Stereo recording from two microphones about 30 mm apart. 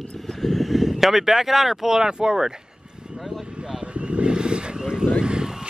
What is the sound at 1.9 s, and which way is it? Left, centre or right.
Speech, right.